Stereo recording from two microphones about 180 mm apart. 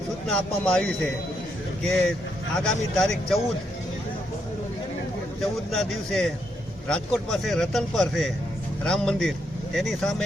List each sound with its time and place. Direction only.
0.3 s a man's voice: 5° left (ahead or behind)
2.6 s a man's voice: centre (ahead or behind)
5.4 s a man's voice: 5° left (ahead or behind)